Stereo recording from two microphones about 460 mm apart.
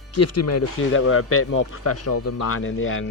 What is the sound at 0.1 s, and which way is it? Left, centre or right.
Speech, left.